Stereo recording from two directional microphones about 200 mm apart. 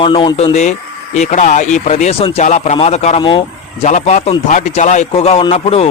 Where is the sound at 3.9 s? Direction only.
35° left (ahead or behind).